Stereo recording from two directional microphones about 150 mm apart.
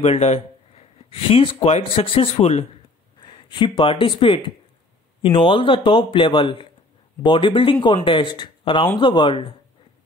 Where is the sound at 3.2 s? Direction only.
30° left (ahead or behind).